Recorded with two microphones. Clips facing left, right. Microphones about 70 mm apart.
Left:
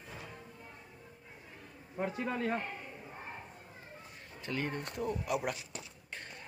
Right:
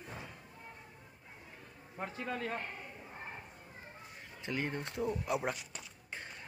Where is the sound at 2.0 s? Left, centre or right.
Centre.